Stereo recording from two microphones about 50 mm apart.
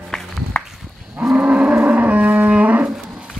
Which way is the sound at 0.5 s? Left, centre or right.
Left.